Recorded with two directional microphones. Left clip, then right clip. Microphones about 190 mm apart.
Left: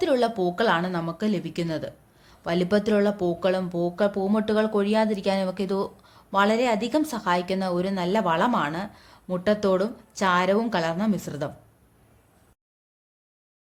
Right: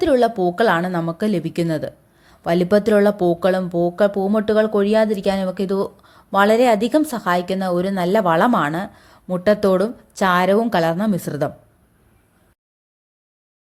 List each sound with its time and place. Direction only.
0.0 s a woman's voice: 20° right (ahead or behind)